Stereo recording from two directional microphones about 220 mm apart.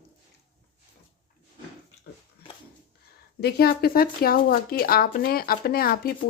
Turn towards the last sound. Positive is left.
turn(degrees=45)  # may be behind; listen again after turning